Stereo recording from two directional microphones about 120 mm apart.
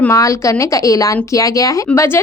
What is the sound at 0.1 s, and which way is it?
A woman's voice, 25° left (ahead or behind).